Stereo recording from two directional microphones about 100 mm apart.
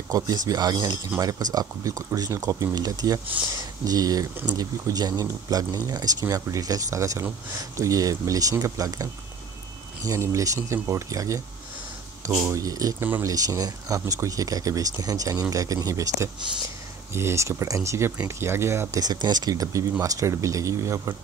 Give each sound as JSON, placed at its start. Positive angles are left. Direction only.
{"t": 0.1, "sound": "speech", "side_deg": -40}
{"t": 12.4, "sound": "speech", "side_deg": -35}
{"t": 18.9, "sound": "speech", "side_deg": -45}